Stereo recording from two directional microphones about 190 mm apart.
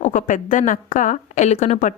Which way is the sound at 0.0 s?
40° left (ahead or behind).